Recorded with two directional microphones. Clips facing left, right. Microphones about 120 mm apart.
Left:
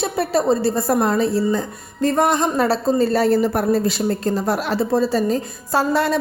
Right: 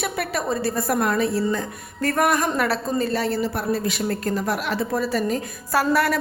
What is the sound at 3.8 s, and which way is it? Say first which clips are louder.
A woman's voice: left 4 dB; 30° left (ahead or behind).